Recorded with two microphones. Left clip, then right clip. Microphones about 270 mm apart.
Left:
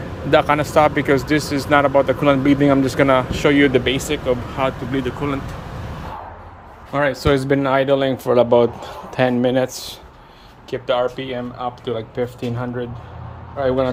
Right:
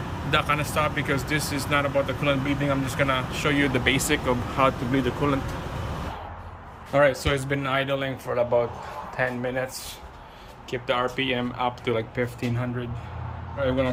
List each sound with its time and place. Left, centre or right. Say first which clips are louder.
0.3 s speech: left 9 dB; centre
6.9 s speech: left 3 dB; centre; by 9.9 s left
10.7 s speech: left 6 dB; centre